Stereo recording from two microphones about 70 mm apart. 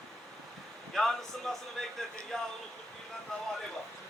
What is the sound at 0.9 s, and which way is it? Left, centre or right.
Speech, centre.